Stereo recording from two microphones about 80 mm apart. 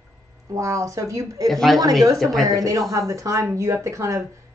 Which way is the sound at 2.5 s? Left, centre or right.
Right.